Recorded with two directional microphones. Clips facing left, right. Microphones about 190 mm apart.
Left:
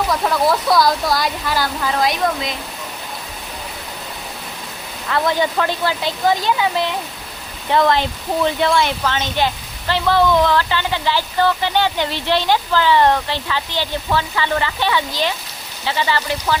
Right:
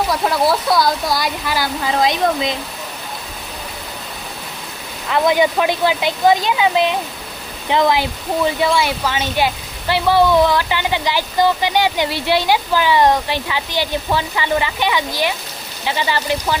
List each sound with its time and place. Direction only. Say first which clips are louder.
0.1 s speech: left 1 dB; 10° right (ahead or behind)
2.0 s speech: right 3 dB; 25° right (ahead or behind)
5.1 s speech: right 3 dB; 15° right (ahead or behind)